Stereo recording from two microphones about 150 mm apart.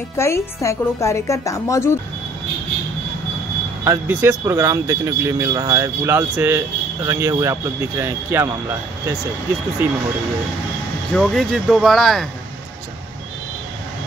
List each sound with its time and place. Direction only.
0.2 s a woman's voice: 20° left (ahead or behind)
3.8 s speech: 15° right (ahead or behind)
9.8 s speech: 15° right (ahead or behind)
11.1 s speech: 5° left (ahead or behind)